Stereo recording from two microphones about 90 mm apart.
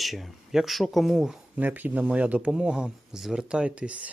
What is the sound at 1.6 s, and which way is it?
Speech, 20° right (ahead or behind).